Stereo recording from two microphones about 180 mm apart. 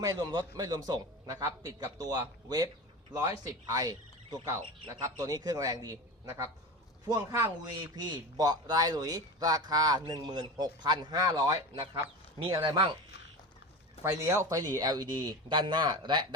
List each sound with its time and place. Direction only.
0.0 s a man's voice: 20° right (ahead or behind)
14.0 s a man's voice: 15° right (ahead or behind)